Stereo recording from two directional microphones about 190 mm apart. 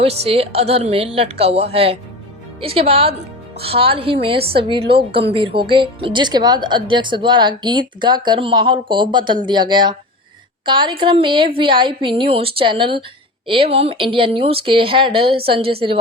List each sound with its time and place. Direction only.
0.0 s a woman's voice: 30° right (ahead or behind)